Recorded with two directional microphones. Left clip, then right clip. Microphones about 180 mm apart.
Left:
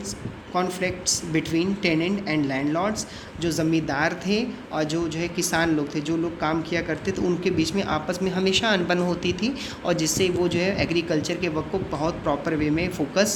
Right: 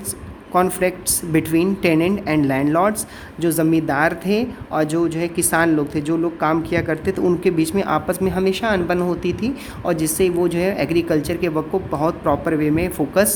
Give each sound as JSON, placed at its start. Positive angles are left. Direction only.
{"t": 0.5, "sound": "a woman's voice", "side_deg": -35}